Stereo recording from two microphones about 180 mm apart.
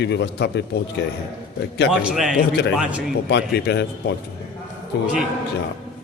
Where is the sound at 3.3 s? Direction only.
65° left (ahead or behind).